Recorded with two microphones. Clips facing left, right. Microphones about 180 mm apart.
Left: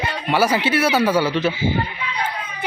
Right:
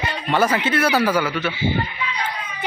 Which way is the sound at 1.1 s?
30° left (ahead or behind).